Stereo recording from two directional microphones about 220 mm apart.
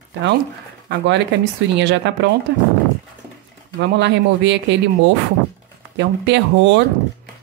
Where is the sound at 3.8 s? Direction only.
50° right (ahead or behind).